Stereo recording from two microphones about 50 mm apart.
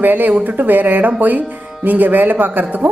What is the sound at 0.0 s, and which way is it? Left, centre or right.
A woman's voice, right.